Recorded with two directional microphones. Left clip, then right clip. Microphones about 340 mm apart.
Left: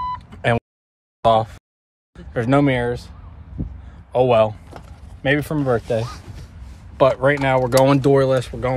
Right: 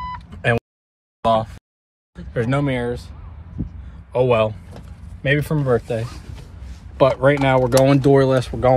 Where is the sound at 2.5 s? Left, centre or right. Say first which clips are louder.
Left 6 dB; left.